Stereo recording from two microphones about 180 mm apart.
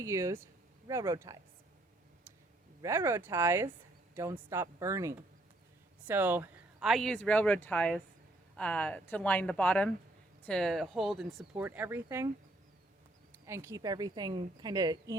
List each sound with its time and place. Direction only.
0.0 s speech: 15° right (ahead or behind)
2.8 s speech: 15° right (ahead or behind)
13.3 s a woman's voice: 15° right (ahead or behind)